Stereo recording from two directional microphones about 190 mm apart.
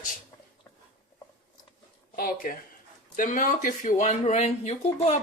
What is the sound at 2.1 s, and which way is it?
Speech, 50° left (ahead or behind).